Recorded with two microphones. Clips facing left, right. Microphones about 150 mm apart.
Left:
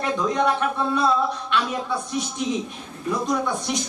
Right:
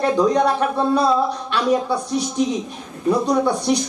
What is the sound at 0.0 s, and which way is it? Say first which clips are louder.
Speech: right 6 dB; 35° right (ahead or behind).